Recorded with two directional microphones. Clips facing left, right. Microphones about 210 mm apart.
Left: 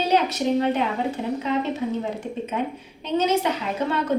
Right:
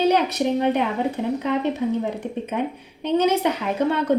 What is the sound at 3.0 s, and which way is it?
Speech, 60° right (ahead or behind).